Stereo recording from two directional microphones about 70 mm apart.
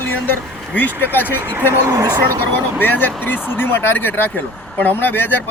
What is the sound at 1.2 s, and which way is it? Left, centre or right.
Speech, right.